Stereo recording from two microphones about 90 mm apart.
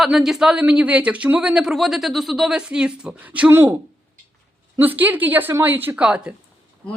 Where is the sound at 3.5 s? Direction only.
25° right (ahead or behind).